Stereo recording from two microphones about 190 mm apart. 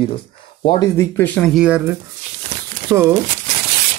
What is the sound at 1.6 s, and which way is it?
Speech, 5° right (ahead or behind).